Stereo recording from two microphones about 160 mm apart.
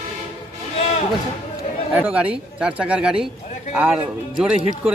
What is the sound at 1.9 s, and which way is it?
Speech, 10° right (ahead or behind).